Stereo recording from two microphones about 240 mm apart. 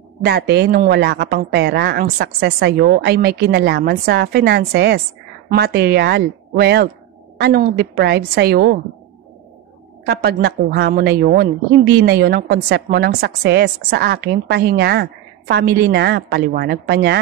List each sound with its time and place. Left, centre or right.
0.2 s a woman's voice: right
10.0 s a woman's voice: right